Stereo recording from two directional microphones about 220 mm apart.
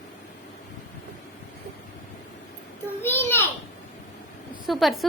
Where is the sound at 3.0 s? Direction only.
10° left (ahead or behind).